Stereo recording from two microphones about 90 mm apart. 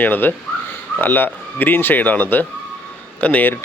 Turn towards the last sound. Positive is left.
turn(degrees=15)  # may be behind; listen again after turning